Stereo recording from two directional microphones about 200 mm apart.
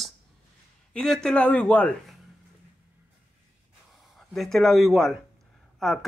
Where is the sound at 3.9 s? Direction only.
Centre (ahead or behind).